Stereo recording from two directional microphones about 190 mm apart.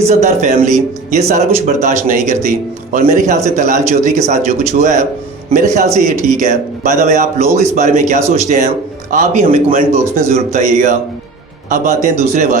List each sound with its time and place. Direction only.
0.1 s a man's voice: 35° right (ahead or behind)